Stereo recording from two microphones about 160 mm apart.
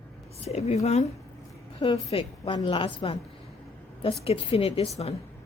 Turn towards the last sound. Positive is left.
turn(degrees=40)  # may be behind; listen again after turning